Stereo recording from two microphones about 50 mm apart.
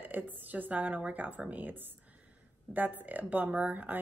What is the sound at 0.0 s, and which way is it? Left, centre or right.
Speech, right.